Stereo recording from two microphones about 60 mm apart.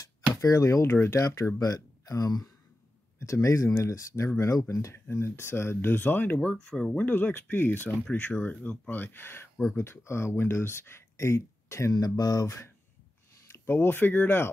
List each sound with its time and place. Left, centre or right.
0.0 s a sound: left
1.1 s speech: left
1.6 s speech: left
3.4 s speech: left
5.0 s speech: left
6.4 s speech: centre
7.0 s speech: left
8.1 s speech: left
11.9 s speech: left
12.4 s speech: left
13.5 s speech: left